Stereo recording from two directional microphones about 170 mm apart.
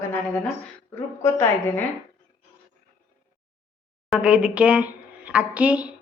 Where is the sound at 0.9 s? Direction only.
10° left (ahead or behind).